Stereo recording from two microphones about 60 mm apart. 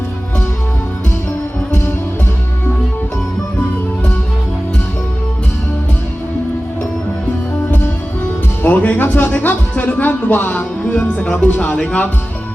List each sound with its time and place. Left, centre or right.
8.6 s speech: left